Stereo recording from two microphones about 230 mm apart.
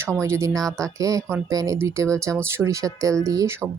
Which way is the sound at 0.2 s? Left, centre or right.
Centre.